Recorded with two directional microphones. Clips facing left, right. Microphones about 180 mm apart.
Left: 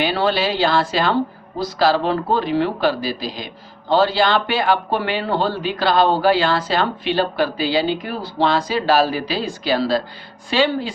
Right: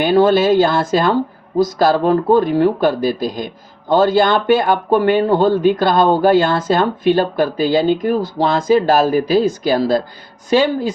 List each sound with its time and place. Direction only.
0.0 s speech: 45° right (ahead or behind)